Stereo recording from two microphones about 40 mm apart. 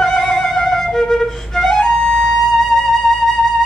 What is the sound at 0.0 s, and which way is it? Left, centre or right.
Flute, centre.